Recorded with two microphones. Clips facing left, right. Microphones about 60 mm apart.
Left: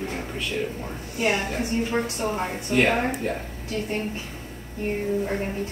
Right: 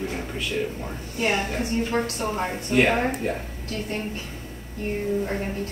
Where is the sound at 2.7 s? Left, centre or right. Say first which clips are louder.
Right 1 dB; centre.